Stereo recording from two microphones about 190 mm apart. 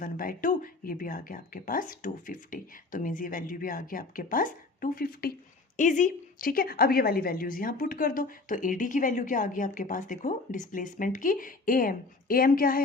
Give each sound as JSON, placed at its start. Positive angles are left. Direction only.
{"t": 0.0, "sound": "speech", "side_deg": 45}